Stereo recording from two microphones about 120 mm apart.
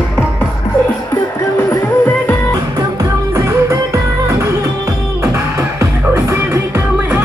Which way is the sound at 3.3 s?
25° right (ahead or behind).